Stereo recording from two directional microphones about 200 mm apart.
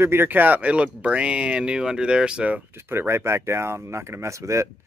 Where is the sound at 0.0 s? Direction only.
10° right (ahead or behind).